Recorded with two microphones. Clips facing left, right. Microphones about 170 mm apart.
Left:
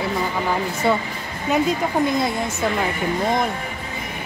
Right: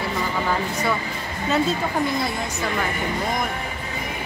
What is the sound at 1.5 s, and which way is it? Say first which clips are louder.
Speech: left 2 dB; 20° left (ahead or behind).